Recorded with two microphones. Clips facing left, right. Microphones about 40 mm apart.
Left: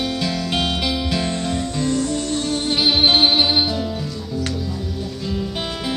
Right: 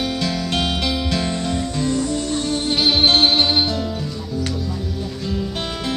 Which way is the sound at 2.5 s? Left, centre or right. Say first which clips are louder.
Even; centre.